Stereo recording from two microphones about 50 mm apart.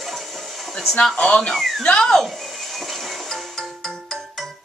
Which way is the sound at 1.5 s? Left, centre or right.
Centre.